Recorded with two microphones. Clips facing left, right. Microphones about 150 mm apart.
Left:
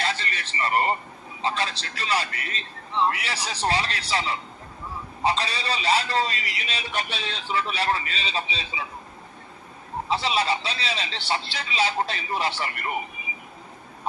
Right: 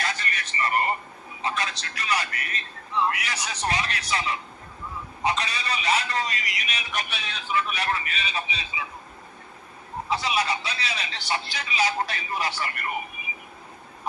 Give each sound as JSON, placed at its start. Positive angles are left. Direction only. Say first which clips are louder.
{"t": 0.0, "sound": "a sound", "louder": "left 2 dB", "side_deg": 30}
{"t": 1.4, "sound": "a man's voice", "louder": "left 2 dB", "side_deg": 30}
{"t": 10.1, "sound": "a man's voice", "louder": "left 2 dB", "side_deg": 30}